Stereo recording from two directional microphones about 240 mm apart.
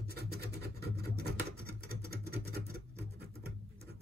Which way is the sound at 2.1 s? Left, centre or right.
Right.